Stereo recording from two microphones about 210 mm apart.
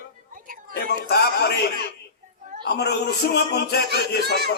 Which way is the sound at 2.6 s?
50° left (ahead or behind).